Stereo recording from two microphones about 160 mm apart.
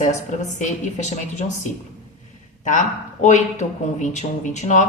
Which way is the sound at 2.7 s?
50° left (ahead or behind).